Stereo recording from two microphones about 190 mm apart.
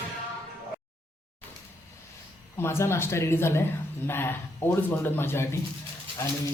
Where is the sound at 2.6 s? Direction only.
15° left (ahead or behind).